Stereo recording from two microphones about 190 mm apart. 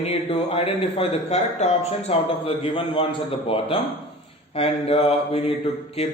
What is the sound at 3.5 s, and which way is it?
Speech, 30° left (ahead or behind).